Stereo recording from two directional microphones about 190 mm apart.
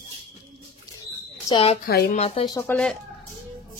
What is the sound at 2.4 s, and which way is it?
Speech, 20° left (ahead or behind).